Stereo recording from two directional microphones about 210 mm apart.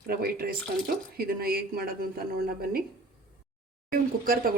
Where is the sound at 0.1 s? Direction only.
45° right (ahead or behind).